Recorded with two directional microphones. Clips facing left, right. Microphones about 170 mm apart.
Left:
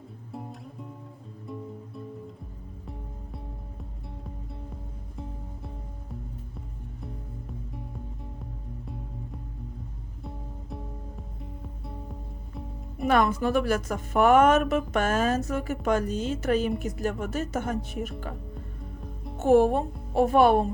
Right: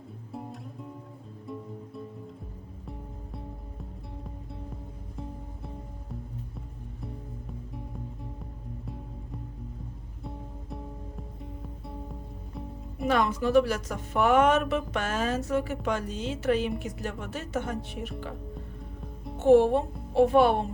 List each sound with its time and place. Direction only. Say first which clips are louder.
0.3 s music: even; centre (ahead or behind)
4.7 s music: even; centre (ahead or behind)
10.2 s music: even; centre (ahead or behind)
13.1 s speech: left 2 dB; 50° left (ahead or behind)
19.4 s speech: even; 45° left (ahead or behind)